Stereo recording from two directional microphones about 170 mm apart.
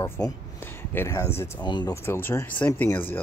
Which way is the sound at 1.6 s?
25° left (ahead or behind).